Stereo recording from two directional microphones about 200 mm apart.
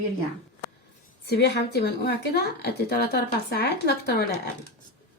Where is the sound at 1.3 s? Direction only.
55° left (ahead or behind).